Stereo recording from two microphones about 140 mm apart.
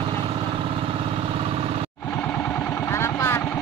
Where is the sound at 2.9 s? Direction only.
20° left (ahead or behind).